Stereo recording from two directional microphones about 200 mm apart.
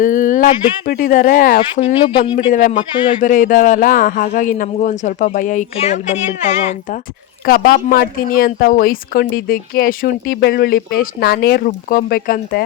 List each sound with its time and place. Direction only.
0.0 s speech: 40° left (ahead or behind)
1.7 s speech: 25° left (ahead or behind)
2.5 s a man's voice: 40° left (ahead or behind)
7.4 s speech: 50° left (ahead or behind)